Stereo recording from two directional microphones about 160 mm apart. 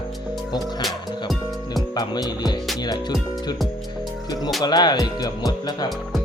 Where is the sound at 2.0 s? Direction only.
25° left (ahead or behind).